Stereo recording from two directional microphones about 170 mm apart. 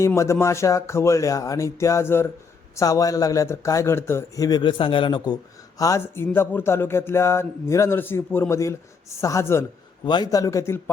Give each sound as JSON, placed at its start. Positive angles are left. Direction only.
{"t": 0.0, "sound": "speech", "side_deg": 15}